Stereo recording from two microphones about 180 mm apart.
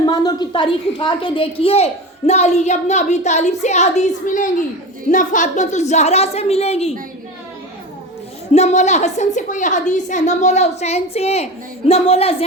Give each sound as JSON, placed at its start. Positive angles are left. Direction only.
{"t": 0.0, "sound": "a woman's voice", "side_deg": 20}
{"t": 8.5, "sound": "a woman's voice", "side_deg": 40}